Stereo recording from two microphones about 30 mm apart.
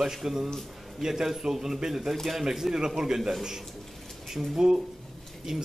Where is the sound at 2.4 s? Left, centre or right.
Centre.